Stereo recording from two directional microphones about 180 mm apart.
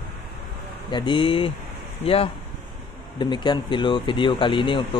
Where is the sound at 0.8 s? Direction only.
25° left (ahead or behind).